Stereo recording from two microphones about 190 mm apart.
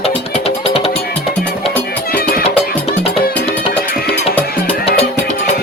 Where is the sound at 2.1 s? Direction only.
55° left (ahead or behind).